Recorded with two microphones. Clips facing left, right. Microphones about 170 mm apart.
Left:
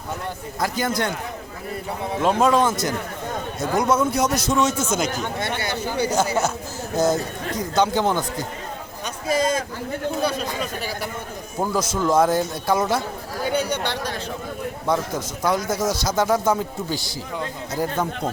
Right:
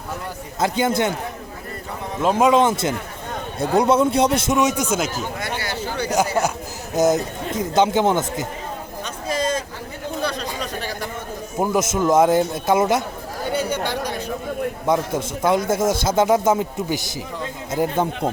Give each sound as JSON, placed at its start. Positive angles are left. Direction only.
{"t": 0.6, "sound": "speech", "side_deg": -25}
{"t": 2.4, "sound": "speech", "side_deg": -20}
{"t": 4.9, "sound": "speech", "side_deg": -5}
{"t": 5.5, "sound": "a sound", "side_deg": 20}
{"t": 6.9, "sound": "speech", "side_deg": -20}
{"t": 9.2, "sound": "a sound", "side_deg": 10}
{"t": 10.2, "sound": "a man's voice", "side_deg": 5}
{"t": 11.6, "sound": "speech", "side_deg": -20}
{"t": 13.5, "sound": "chatter", "side_deg": -5}
{"t": 14.8, "sound": "speech", "side_deg": -25}
{"t": 15.8, "sound": "speech", "side_deg": -50}
{"t": 16.0, "sound": "speech", "side_deg": -20}